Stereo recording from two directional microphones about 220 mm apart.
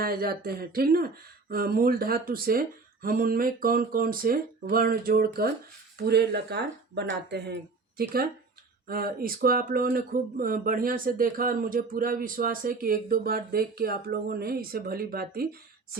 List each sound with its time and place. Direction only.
0.0 s speech: 45° right (ahead or behind)